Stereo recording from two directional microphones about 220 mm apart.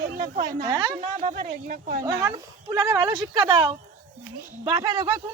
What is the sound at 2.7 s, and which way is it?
Speech, 15° right (ahead or behind).